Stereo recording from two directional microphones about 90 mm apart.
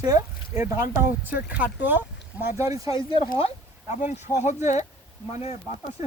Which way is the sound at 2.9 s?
85° left.